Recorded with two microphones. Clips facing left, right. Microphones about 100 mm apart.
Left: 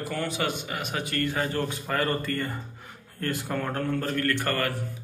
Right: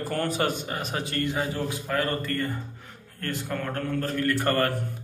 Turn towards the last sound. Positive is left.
turn(degrees=-35)  # may be behind; listen again after turning